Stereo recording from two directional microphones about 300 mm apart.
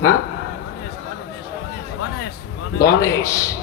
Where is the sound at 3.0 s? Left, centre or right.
Centre.